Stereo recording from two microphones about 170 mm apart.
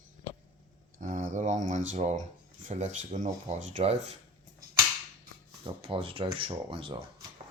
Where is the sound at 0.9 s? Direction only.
50° right (ahead or behind).